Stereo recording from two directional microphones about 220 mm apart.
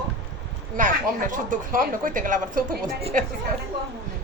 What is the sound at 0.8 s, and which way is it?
Speech, 35° right (ahead or behind).